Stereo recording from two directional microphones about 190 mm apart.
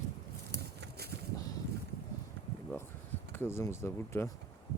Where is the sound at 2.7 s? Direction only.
10° left (ahead or behind).